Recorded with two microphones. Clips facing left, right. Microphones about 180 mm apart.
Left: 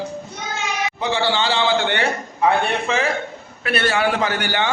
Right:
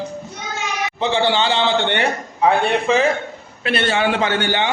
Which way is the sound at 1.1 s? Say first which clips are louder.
Right 3 dB; 20° right (ahead or behind).